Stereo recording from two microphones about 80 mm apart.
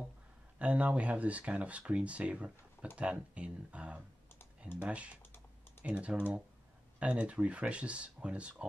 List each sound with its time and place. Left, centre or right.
0.6 s speech: centre